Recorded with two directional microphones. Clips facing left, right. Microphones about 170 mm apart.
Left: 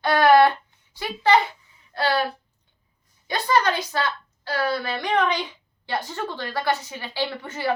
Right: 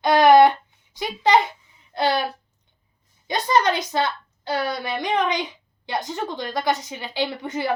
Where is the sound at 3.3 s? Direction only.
20° right (ahead or behind).